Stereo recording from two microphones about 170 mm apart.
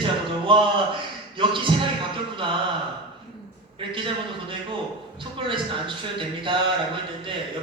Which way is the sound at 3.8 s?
30° right (ahead or behind).